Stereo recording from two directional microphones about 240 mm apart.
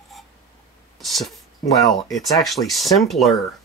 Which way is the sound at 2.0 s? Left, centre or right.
Centre.